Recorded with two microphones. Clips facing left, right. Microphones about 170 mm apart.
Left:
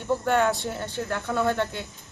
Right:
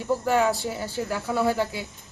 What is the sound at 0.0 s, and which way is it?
Speech, centre (ahead or behind).